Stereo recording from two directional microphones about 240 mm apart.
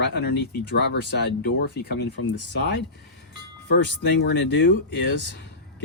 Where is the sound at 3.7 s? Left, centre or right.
Left.